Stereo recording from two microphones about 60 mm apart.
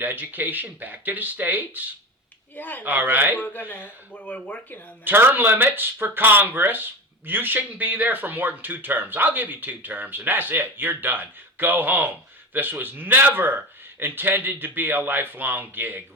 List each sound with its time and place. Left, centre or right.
0.0 s speech: right
2.6 s speech: left
2.8 s speech: right
3.3 s speech: left
5.0 s speech: right